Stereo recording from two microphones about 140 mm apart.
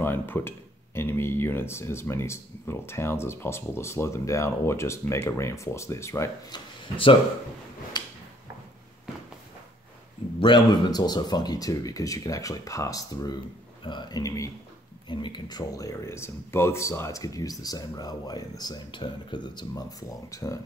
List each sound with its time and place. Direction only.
0.0 s speech: 15° left (ahead or behind)
10.4 s speech: 30° left (ahead or behind)